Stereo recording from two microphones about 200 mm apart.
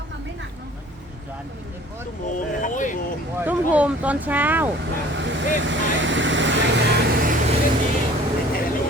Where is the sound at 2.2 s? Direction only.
40° left (ahead or behind).